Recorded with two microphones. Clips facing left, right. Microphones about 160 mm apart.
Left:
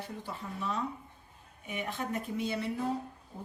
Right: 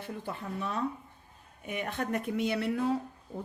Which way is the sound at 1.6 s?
65° right (ahead or behind).